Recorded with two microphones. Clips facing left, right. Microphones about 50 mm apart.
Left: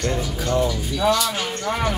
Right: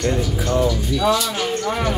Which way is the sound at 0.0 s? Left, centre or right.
Centre.